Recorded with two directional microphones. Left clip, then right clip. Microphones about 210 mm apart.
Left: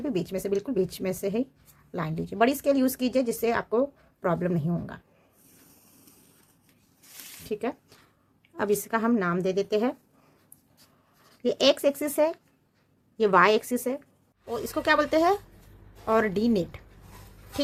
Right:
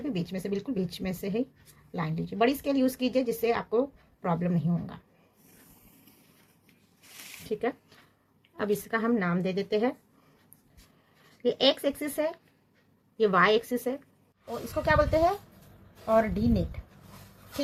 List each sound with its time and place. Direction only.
0.0 s speech: 45° left (ahead or behind)
7.5 s speech: 35° left (ahead or behind)
11.4 s speech: 40° left (ahead or behind)